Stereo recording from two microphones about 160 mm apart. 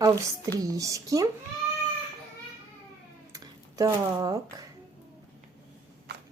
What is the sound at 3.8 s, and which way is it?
Speech, 20° right (ahead or behind).